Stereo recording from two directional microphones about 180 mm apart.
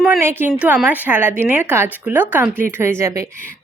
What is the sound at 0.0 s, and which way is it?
A woman's voice, 10° right (ahead or behind).